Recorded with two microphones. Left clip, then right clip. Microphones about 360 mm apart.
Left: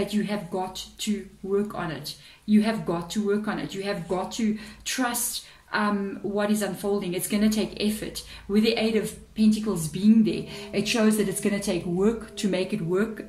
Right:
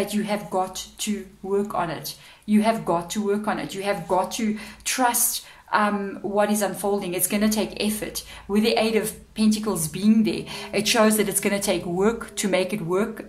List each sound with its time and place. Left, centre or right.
0.0 s speech: centre